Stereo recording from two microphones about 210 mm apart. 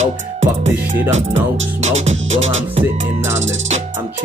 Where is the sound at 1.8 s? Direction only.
35° right (ahead or behind).